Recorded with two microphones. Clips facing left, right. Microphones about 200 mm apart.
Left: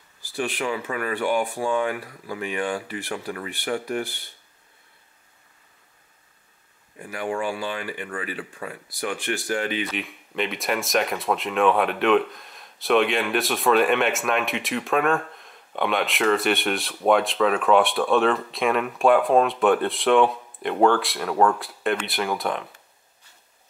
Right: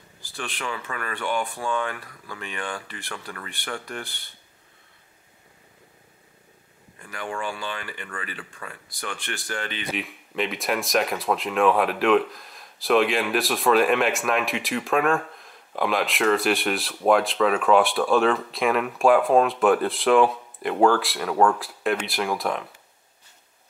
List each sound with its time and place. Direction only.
0.4 s speech: 10° left (ahead or behind)
7.0 s speech: 15° left (ahead or behind)
9.9 s speech: centre (ahead or behind)